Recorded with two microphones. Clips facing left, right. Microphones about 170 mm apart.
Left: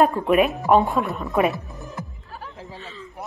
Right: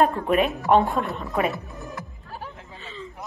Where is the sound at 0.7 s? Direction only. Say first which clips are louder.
Left 1 dB; centre (ahead or behind).